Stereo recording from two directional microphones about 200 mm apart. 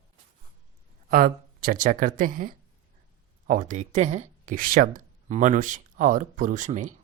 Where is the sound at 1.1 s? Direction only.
45° right (ahead or behind).